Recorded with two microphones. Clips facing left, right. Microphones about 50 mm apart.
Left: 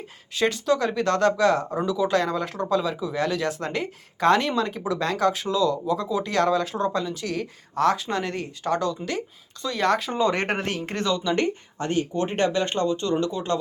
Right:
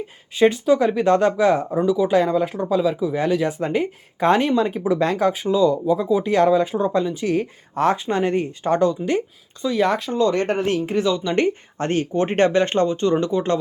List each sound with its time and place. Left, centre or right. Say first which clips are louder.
0.3 s speech: right 6 dB; centre
5.3 s speech: right 5 dB; centre
6.2 s speech: right 5 dB; right
9.6 s speech: right 3 dB; centre
11.8 s speech: right 4 dB; right